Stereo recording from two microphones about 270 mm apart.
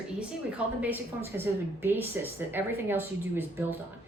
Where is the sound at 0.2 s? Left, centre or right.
Centre.